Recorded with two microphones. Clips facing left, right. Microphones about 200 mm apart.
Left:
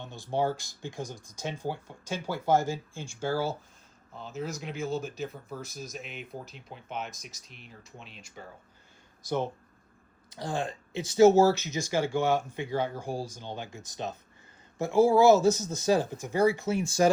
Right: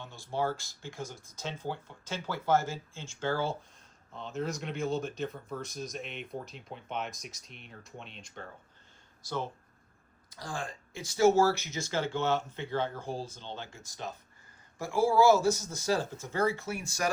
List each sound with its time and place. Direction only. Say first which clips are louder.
0.0 s speech: left 4 dB; 20° left (ahead or behind)
9.2 s speech: left 6 dB; 20° left (ahead or behind)